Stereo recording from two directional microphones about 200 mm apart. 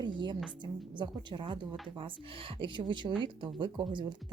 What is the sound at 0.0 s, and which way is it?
Music, 20° right (ahead or behind).